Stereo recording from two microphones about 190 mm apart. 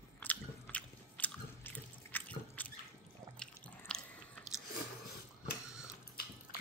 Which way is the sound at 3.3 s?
5° left (ahead or behind).